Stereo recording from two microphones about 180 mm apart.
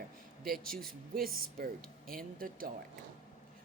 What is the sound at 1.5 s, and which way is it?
A man's voice, 55° right (ahead or behind).